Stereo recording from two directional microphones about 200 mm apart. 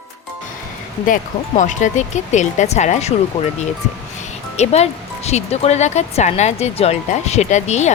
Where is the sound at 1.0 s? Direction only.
40° left (ahead or behind).